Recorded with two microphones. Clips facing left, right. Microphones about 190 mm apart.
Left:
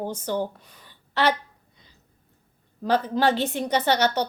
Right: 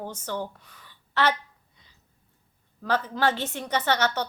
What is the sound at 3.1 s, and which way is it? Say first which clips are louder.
Speech: left 4 dB; 15° left (ahead or behind).